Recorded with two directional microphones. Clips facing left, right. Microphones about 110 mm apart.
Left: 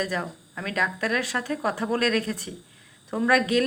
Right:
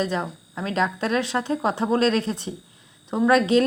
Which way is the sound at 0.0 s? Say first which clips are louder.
Right 3 dB; 25° right (ahead or behind).